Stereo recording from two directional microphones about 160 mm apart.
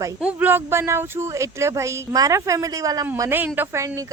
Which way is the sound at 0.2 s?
10° right (ahead or behind).